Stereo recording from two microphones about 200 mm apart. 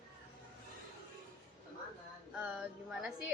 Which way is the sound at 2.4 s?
5° right (ahead or behind).